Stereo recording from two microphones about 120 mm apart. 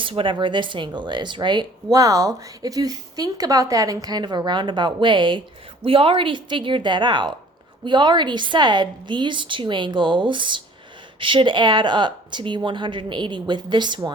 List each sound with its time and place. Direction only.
0.0 s a woman's voice: 45° right (ahead or behind)